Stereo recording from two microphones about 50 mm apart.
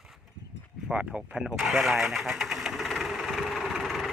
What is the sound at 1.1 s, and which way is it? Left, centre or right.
Speech, right.